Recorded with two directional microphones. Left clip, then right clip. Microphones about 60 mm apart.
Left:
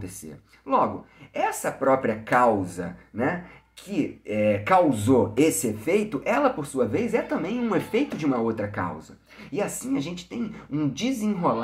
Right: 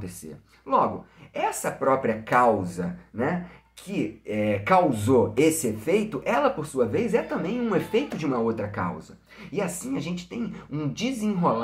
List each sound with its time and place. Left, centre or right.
0.7 s speech: centre; by 7.9 s left
7.9 s speech: left